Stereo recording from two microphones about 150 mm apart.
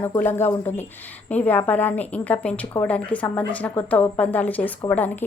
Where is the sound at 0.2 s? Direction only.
15° left (ahead or behind).